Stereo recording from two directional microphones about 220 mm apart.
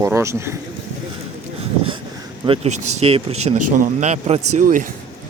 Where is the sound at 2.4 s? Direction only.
25° right (ahead or behind).